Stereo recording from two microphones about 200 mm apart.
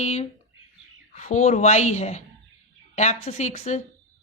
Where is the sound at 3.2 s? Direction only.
35° left (ahead or behind).